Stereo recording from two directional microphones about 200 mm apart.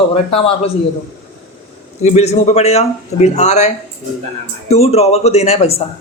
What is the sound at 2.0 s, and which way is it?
Speech, 35° left (ahead or behind).